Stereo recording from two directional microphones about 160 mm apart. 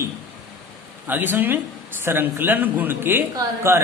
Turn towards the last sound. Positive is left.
turn(degrees=-15)  # may be behind; listen again after turning